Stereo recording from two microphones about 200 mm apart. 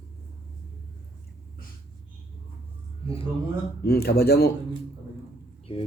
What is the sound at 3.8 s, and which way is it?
Speech, 50° left (ahead or behind).